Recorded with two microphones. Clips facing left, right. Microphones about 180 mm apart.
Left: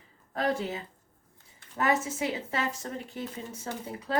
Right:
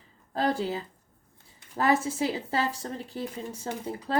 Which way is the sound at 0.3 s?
30° right (ahead or behind).